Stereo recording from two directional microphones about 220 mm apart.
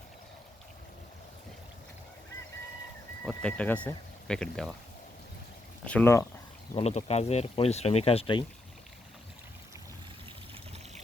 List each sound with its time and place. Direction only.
3.2 s speech: 5° left (ahead or behind)
5.8 s speech: 5° left (ahead or behind)
6.7 s speech: 30° left (ahead or behind)